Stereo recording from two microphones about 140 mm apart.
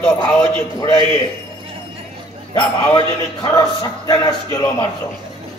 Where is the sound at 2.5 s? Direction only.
30° left (ahead or behind).